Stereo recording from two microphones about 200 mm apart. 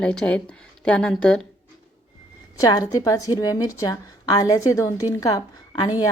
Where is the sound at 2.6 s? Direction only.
20° left (ahead or behind).